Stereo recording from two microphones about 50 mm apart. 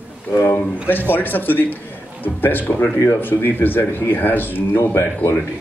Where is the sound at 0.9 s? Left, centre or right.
Left.